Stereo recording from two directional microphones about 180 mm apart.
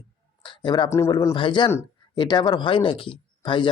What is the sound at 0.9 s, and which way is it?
Speech, 15° left (ahead or behind).